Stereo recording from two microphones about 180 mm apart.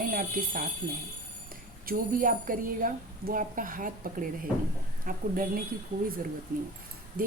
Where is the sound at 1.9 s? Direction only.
50° right (ahead or behind).